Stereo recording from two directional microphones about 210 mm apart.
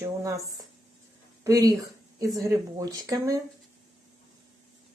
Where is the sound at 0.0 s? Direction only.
15° right (ahead or behind).